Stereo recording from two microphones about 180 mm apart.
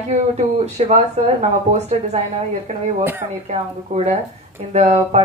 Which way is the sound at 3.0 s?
10° right (ahead or behind).